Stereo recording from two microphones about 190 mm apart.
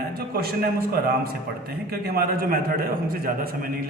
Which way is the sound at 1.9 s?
50° right (ahead or behind).